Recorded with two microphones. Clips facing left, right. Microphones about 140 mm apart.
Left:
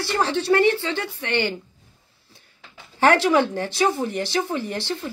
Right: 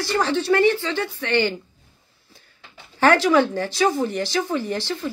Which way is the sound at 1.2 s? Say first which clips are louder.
Right 3 dB; 15° left (ahead or behind).